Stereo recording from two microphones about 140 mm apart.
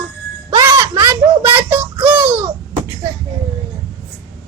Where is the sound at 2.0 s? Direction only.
15° right (ahead or behind).